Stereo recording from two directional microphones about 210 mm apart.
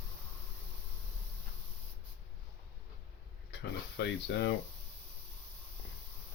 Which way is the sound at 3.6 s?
50° left (ahead or behind).